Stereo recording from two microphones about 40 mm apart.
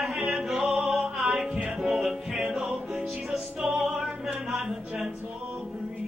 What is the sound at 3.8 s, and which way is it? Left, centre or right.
Music, centre.